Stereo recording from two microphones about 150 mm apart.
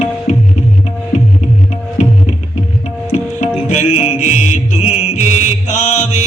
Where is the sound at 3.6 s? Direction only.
50° left (ahead or behind).